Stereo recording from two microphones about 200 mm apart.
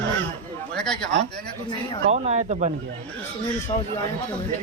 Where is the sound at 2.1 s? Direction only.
35° right (ahead or behind).